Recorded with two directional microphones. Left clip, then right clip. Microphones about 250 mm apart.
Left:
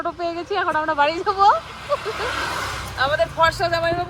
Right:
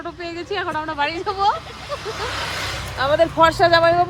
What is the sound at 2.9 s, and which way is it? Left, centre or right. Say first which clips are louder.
Speech: right 3 dB; right.